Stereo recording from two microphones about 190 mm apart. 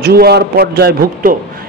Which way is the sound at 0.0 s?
55° right (ahead or behind).